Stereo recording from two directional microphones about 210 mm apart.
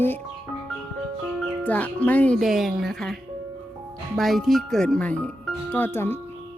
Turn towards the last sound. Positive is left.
turn(degrees=10)  # may be behind; listen again after turning